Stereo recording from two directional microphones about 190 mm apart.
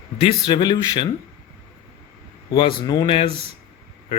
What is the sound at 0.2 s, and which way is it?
Speech, 25° left (ahead or behind).